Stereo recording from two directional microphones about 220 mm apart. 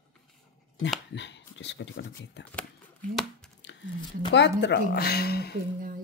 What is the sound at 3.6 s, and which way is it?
Whispering, 55° left (ahead or behind).